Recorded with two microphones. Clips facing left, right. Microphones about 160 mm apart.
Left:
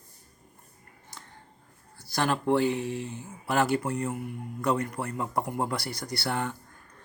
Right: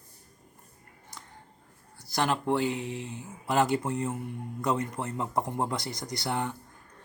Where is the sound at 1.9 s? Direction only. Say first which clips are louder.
Left 1 dB; 20° right (ahead or behind).